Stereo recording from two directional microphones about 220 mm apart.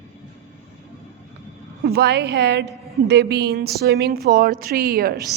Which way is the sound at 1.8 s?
45° right (ahead or behind).